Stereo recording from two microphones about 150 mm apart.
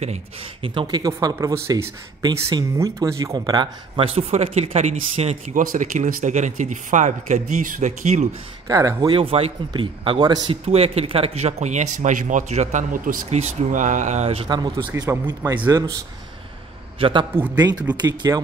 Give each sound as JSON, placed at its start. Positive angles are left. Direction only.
{"t": 0.0, "sound": "speech", "side_deg": -40}
{"t": 1.0, "sound": "speech", "side_deg": -25}
{"t": 5.6, "sound": "speech", "side_deg": -60}
{"t": 8.6, "sound": "speech", "side_deg": -25}
{"t": 9.1, "sound": "speech", "side_deg": -40}
{"t": 10.6, "sound": "speech", "side_deg": -40}
{"t": 13.4, "sound": "speech", "side_deg": -55}
{"t": 15.0, "sound": "speech", "side_deg": -25}
{"t": 17.0, "sound": "speech", "side_deg": -35}